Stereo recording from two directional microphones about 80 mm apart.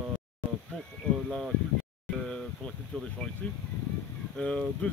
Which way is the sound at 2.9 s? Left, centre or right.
Centre.